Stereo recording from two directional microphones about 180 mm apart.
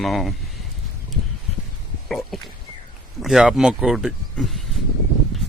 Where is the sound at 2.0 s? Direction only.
Centre (ahead or behind).